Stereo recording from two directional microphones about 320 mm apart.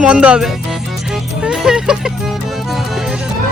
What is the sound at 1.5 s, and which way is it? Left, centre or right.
Music, centre.